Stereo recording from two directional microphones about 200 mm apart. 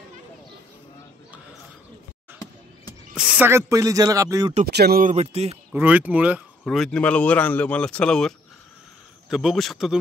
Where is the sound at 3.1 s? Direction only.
5° right (ahead or behind).